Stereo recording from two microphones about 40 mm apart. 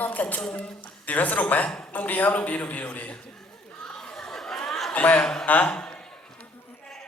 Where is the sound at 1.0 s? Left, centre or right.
Left.